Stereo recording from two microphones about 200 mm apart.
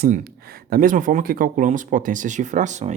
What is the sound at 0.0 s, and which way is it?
Speech, 50° right (ahead or behind).